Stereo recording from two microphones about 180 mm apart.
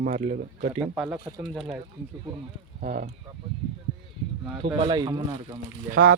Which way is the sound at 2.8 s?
55° right (ahead or behind).